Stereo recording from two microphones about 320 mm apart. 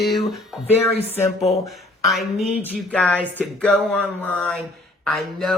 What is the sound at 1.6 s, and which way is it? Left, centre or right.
Speech, centre.